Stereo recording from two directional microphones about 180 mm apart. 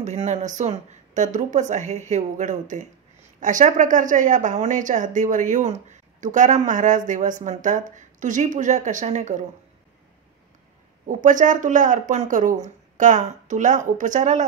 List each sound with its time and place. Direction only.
0.0 s speech: 40° right (ahead or behind)
11.1 s speech: 45° right (ahead or behind)